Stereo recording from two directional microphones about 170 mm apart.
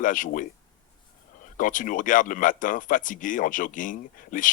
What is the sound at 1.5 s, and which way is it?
Speech, 50° left (ahead or behind).